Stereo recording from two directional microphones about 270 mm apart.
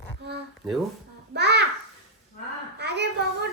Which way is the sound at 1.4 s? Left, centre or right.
Right.